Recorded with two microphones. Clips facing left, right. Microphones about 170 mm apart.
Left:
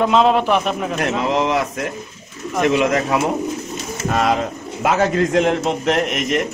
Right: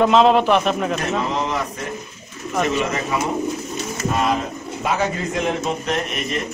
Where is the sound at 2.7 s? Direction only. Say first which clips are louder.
Left 5 dB; 85° left.